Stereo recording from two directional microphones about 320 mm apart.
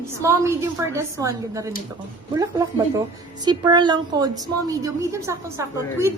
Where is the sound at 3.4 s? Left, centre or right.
Centre.